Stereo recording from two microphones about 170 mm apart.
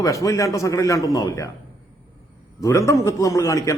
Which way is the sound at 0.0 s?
20° left (ahead or behind).